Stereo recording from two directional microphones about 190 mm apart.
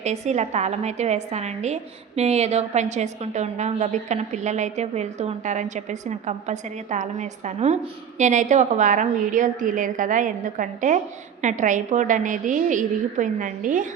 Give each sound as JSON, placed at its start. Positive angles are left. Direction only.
{"t": 0.0, "sound": "a woman's voice", "side_deg": -35}